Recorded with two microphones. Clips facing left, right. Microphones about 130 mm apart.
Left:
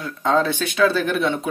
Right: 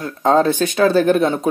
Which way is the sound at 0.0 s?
40° right (ahead or behind).